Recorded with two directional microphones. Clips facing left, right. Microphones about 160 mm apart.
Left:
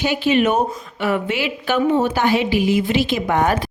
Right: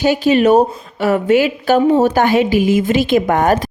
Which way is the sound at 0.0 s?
40° right (ahead or behind).